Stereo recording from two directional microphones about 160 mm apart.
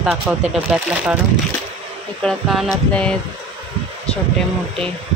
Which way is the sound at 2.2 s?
Centre (ahead or behind).